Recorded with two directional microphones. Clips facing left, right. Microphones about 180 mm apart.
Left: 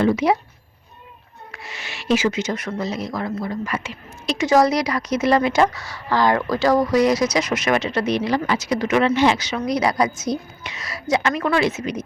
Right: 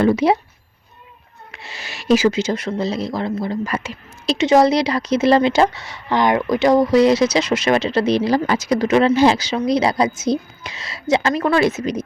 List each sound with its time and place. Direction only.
0.0 s speech: 35° right (ahead or behind)
1.5 s speech: 30° right (ahead or behind)
4.4 s a woman's voice: 25° right (ahead or behind)